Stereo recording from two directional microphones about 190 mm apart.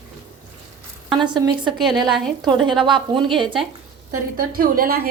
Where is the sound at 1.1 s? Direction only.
25° right (ahead or behind).